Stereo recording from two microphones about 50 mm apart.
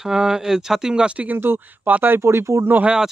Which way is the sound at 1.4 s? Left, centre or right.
Right.